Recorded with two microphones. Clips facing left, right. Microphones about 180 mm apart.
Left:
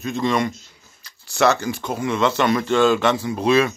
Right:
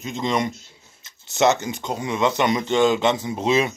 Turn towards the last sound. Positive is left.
turn(degrees=-20)  # may be behind; listen again after turning